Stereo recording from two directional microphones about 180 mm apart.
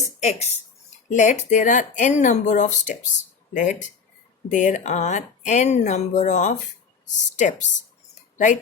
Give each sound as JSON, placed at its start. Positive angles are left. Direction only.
{"t": 0.2, "sound": "speech", "side_deg": 40}